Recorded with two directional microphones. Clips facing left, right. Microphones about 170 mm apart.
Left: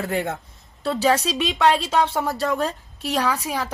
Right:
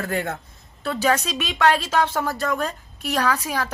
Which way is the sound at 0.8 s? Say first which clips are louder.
Left 2 dB; 35° left (ahead or behind).